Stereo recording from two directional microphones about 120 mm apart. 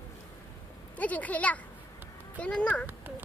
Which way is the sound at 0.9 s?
10° left (ahead or behind).